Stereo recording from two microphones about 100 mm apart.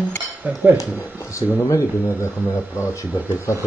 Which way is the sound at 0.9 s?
30° left (ahead or behind).